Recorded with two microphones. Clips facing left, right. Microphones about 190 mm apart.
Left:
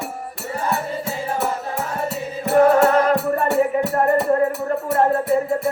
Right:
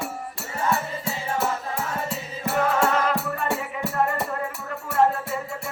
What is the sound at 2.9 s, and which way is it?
Music, 40° left (ahead or behind).